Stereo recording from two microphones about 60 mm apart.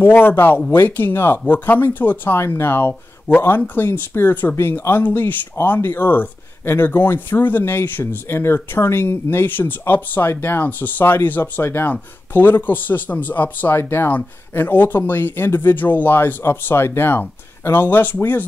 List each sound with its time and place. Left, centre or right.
0.0 s speech: left
2.4 s speech: left